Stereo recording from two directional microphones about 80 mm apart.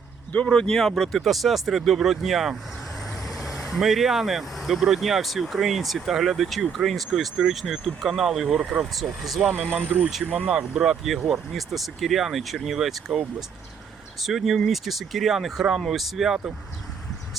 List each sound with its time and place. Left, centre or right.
0.4 s speech: centre
3.2 s vehicle: centre
3.8 s speech: centre
9.7 s speech: right; by 16.4 s centre